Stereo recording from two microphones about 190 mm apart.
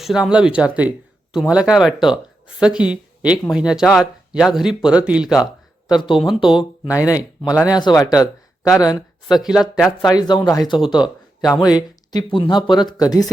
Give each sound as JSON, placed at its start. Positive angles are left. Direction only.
{"t": 0.0, "sound": "speech", "side_deg": -5}
{"t": 5.5, "sound": "a sound", "side_deg": 25}
{"t": 6.2, "sound": "speech", "side_deg": 0}
{"t": 6.8, "sound": "speech", "side_deg": 20}
{"t": 9.3, "sound": "speech", "side_deg": 0}
{"t": 10.0, "sound": "speech", "side_deg": 20}
{"t": 12.1, "sound": "speech", "side_deg": 25}